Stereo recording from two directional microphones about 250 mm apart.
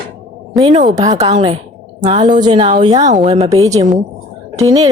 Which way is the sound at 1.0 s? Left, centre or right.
Centre.